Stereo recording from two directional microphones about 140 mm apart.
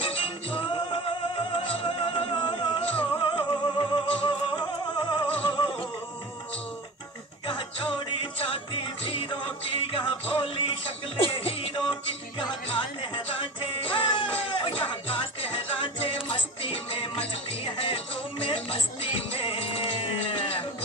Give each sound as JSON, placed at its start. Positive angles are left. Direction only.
{"t": 0.0, "sound": "music", "side_deg": 40}
{"t": 2.9, "sound": "music", "side_deg": 10}
{"t": 3.2, "sound": "music", "side_deg": 35}
{"t": 7.4, "sound": "music", "side_deg": 35}